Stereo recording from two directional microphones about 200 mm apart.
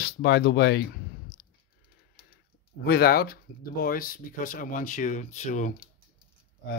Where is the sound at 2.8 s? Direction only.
50° left (ahead or behind).